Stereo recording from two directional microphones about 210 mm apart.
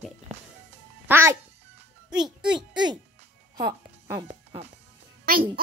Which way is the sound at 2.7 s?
20° right (ahead or behind).